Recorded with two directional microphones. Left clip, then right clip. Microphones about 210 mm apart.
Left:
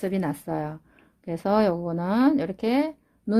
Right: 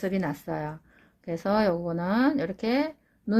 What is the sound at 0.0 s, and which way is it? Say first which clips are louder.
Speech: left 2 dB; 45° left (ahead or behind).